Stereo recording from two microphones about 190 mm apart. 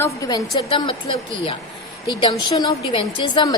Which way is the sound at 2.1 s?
25° left (ahead or behind).